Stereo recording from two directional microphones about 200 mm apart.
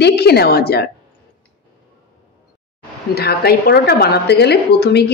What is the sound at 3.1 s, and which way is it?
A woman's voice, 50° left (ahead or behind).